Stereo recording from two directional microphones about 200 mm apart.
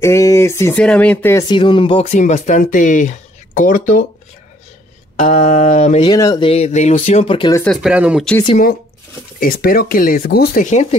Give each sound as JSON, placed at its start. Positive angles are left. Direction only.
{"t": 0.0, "sound": "speech", "side_deg": 15}
{"t": 1.5, "sound": "speech", "side_deg": 25}
{"t": 5.2, "sound": "speech", "side_deg": 35}
{"t": 6.1, "sound": "speech", "side_deg": 20}
{"t": 7.6, "sound": "speech", "side_deg": 0}
{"t": 9.4, "sound": "speech", "side_deg": 50}